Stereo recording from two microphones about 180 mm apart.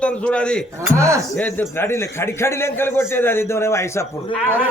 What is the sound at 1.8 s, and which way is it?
A man's voice, 15° left (ahead or behind).